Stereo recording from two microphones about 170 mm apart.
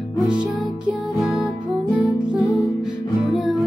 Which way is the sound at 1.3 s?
Centre (ahead or behind).